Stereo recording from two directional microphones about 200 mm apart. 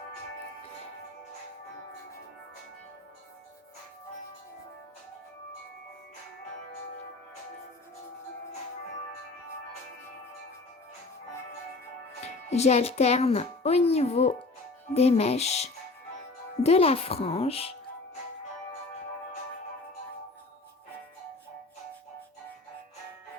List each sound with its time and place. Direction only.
12.2 s speech: 35° left (ahead or behind)